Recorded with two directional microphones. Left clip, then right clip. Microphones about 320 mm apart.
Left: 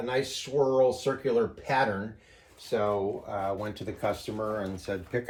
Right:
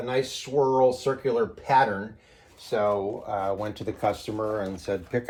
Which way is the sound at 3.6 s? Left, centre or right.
Right.